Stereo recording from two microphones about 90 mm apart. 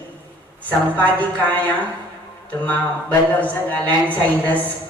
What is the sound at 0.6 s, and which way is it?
A woman's voice, 20° left (ahead or behind).